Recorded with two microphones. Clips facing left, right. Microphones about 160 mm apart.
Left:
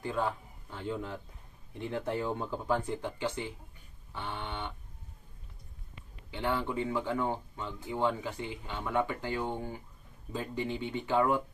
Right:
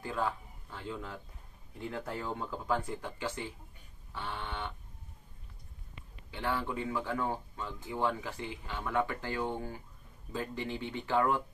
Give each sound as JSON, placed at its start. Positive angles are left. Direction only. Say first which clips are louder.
{"t": 0.0, "sound": "speech", "louder": "left 2 dB", "side_deg": 20}
{"t": 6.3, "sound": "speech", "louder": "left 3 dB", "side_deg": 20}